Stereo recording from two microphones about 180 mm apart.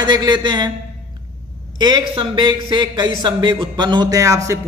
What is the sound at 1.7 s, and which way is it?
Speech, 25° right (ahead or behind).